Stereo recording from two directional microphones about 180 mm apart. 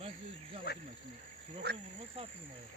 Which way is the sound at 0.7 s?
60° left (ahead or behind).